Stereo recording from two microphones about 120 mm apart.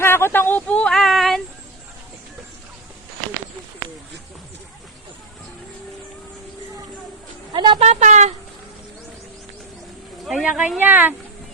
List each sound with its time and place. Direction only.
0.0 s speech: 20° left (ahead or behind); by 1.4 s centre (ahead or behind)
7.5 s a sound: 40° right (ahead or behind)
7.8 s a woman's voice: 65° right (ahead or behind)
10.4 s speech: 10° right (ahead or behind)